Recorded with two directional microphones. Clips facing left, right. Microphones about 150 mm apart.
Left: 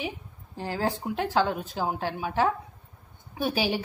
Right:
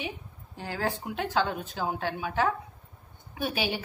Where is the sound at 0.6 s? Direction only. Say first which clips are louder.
Left 3 dB; 30° left (ahead or behind).